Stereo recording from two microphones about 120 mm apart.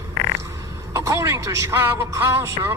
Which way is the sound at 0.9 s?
25° right (ahead or behind).